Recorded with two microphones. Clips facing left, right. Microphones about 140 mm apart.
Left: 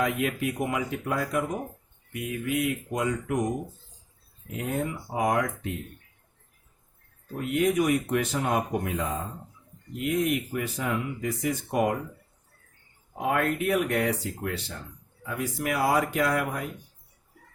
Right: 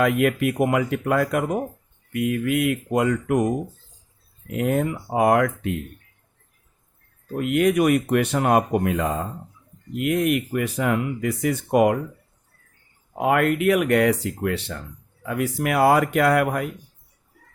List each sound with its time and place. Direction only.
0.0 s speech: 65° right (ahead or behind)
7.3 s speech: 75° right (ahead or behind)
13.1 s speech: 80° right